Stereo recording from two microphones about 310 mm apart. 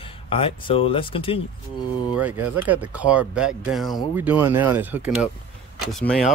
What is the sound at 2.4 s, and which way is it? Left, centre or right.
Speech, centre.